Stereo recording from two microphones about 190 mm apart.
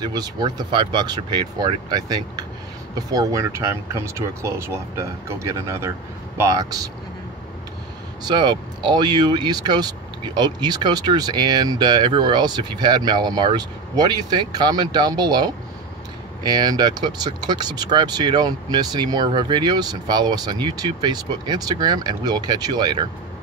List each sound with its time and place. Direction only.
0.0 s speech: 20° right (ahead or behind)
8.2 s speech: 25° right (ahead or behind)